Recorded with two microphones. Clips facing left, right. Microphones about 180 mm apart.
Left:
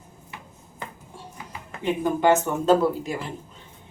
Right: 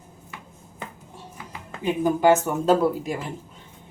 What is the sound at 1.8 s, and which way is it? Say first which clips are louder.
Speech: right 2 dB; 10° right (ahead or behind).